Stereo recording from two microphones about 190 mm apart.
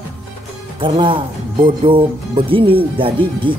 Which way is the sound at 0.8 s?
25° right (ahead or behind).